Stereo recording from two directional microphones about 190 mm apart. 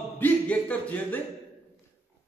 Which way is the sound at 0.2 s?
10° left (ahead or behind).